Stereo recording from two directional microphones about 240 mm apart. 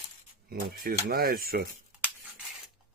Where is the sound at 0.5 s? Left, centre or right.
Right.